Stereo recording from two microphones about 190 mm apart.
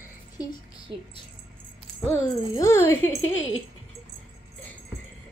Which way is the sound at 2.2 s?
15° left (ahead or behind).